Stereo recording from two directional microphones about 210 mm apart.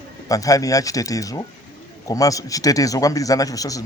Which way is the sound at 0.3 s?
15° left (ahead or behind).